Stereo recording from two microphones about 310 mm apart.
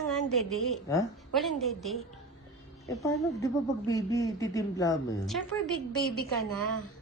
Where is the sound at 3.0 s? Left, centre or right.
Centre.